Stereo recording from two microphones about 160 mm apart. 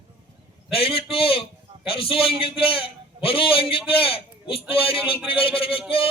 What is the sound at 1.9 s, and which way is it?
A man's voice, 35° left (ahead or behind).